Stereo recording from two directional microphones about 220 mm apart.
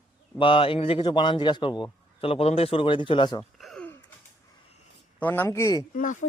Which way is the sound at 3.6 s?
5° left (ahead or behind).